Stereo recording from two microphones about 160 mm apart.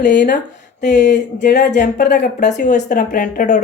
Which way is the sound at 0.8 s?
50° left (ahead or behind).